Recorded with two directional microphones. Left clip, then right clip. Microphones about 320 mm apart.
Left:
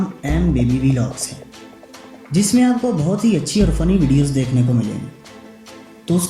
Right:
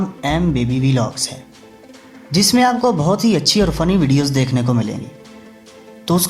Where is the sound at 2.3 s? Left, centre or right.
Centre.